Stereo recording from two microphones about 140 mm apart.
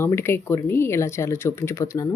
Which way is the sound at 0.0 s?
20° left (ahead or behind).